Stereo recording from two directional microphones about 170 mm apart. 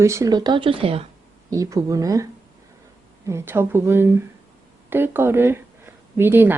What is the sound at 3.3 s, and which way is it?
A woman's voice, 15° right (ahead or behind).